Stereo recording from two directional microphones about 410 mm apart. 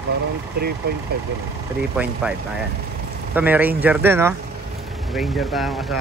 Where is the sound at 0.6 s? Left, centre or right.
Right.